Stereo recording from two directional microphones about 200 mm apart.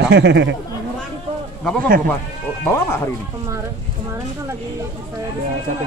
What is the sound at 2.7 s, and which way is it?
Speech, 10° left (ahead or behind).